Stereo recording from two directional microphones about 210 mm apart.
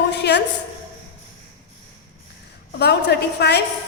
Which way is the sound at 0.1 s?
55° left (ahead or behind).